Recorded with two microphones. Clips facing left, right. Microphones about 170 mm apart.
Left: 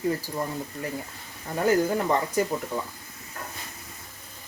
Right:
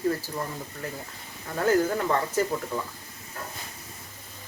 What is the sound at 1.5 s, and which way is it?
Speech, 15° left (ahead or behind).